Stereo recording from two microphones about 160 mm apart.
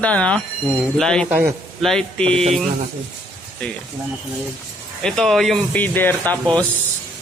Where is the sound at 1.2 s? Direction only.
10° right (ahead or behind).